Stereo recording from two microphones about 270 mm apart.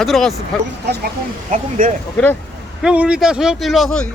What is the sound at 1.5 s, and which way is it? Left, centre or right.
Speech, right.